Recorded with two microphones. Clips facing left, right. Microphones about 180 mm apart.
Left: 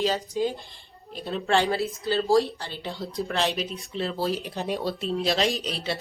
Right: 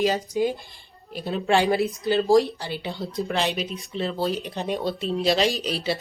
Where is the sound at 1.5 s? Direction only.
15° right (ahead or behind).